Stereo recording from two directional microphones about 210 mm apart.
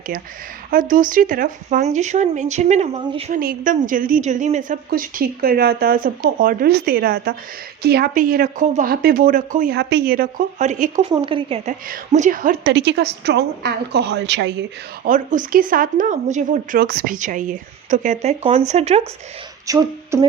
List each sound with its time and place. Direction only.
0.7 s speech: 40° right (ahead or behind)
3.4 s a woman's voice: 40° right (ahead or behind)
11.1 s speech: 25° right (ahead or behind)
11.9 s a woman's voice: 40° right (ahead or behind); by 14.5 s 55° right (ahead or behind)
15.0 s speech: 40° right (ahead or behind)
19.6 s beatboxing: 15° right (ahead or behind)